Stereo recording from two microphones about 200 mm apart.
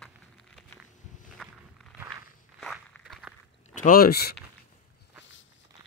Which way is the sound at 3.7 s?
45° left (ahead or behind).